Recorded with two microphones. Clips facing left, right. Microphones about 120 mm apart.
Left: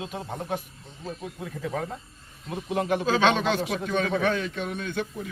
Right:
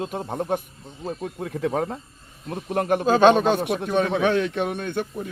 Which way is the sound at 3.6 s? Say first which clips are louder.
Right 4 dB; 60° right (ahead or behind).